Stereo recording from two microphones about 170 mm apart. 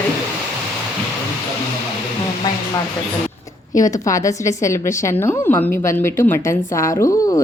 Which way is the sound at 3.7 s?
20° left (ahead or behind).